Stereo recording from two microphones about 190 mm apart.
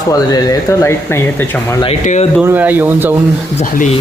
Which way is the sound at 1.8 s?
35° left (ahead or behind).